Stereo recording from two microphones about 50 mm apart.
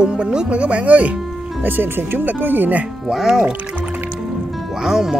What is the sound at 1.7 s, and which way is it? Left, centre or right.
Speech, right.